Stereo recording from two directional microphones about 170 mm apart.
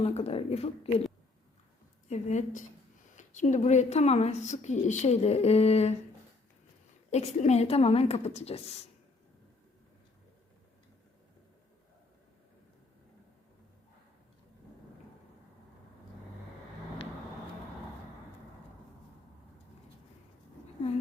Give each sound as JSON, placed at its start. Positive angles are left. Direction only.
{"t": 0.0, "sound": "a woman's voice", "side_deg": 40}
{"t": 2.0, "sound": "a woman's voice", "side_deg": 45}
{"t": 7.1, "sound": "a woman's voice", "side_deg": 40}